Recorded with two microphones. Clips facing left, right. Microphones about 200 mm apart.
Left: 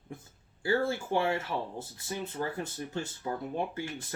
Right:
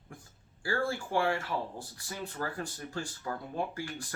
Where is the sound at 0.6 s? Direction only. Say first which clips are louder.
Left 4 dB; 20° left (ahead or behind).